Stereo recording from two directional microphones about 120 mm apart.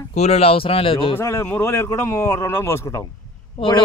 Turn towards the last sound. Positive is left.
turn(degrees=45)  # may be behind; listen again after turning